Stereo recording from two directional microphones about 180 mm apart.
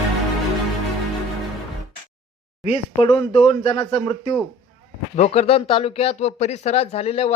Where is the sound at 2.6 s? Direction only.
30° left (ahead or behind).